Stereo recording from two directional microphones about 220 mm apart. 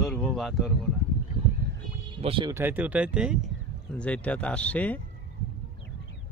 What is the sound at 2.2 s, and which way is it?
Speech, 25° right (ahead or behind).